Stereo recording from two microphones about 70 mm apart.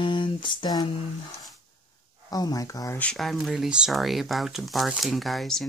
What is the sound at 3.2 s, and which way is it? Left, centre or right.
Speech, centre.